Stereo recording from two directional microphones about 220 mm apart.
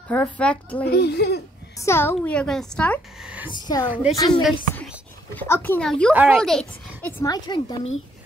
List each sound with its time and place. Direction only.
0.1 s speech: 5° left (ahead or behind)
0.8 s speech: 50° left (ahead or behind)
1.8 s a child's voice: 10° left (ahead or behind)
3.4 s a woman's voice: 20° left (ahead or behind)
4.3 s a child's voice: centre (ahead or behind); by 7.9 s 20° left (ahead or behind)